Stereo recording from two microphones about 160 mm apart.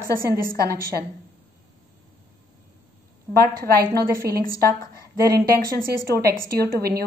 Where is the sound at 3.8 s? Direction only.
75° right (ahead or behind).